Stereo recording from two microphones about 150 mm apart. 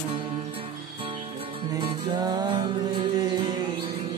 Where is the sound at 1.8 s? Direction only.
30° right (ahead or behind).